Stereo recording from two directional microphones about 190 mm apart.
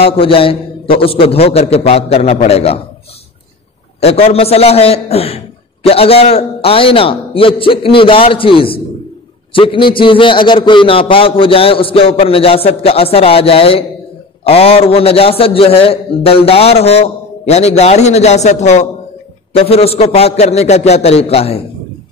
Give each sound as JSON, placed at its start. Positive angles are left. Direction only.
{"t": 0.0, "sound": "a man's voice", "side_deg": 30}
{"t": 4.0, "sound": "a man's voice", "side_deg": 30}